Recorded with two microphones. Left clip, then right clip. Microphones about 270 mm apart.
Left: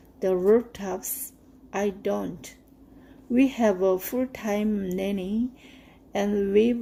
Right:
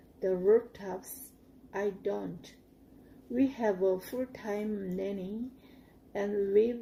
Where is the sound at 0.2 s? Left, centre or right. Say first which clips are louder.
Left 5 dB; left.